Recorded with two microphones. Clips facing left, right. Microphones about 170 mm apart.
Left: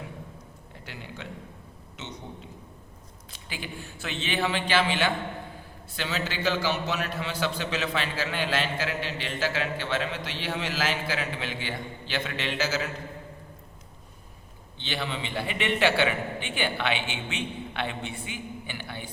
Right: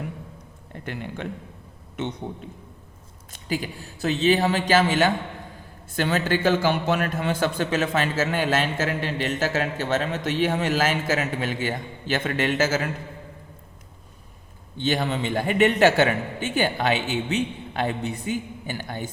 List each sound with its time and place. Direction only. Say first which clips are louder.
0.9 s a man's voice: right 9 dB; 55° right (ahead or behind)
3.3 s a man's voice: right 9 dB; 40° right (ahead or behind)
14.8 s a man's voice: right 8 dB; 45° right (ahead or behind)